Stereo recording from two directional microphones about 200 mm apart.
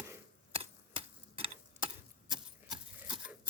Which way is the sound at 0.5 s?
30° right (ahead or behind).